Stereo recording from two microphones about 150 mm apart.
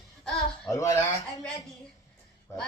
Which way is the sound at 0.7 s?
20° left (ahead or behind).